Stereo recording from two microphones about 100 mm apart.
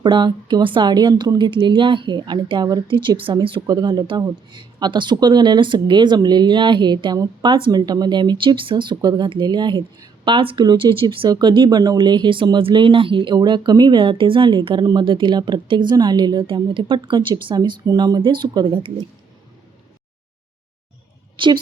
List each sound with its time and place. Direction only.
0.0 s speech: 50° right (ahead or behind)
2.8 s speech: 55° right (ahead or behind)
11.3 s speech: 50° right (ahead or behind)
21.3 s a woman's voice: 55° right (ahead or behind)